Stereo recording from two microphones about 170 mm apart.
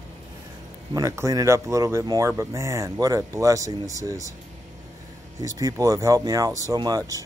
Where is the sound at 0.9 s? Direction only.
20° right (ahead or behind).